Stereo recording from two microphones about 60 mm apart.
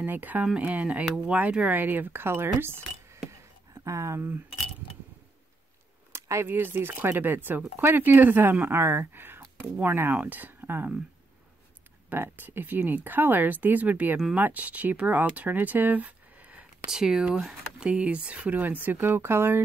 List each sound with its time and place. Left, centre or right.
0.0 s speech: right
1.0 s speech: centre; by 3.3 s right
3.7 s speech: right
6.1 s speech: right
10.6 s a sound: right
12.1 s speech: right
16.9 s speech: centre; by 19.6 s right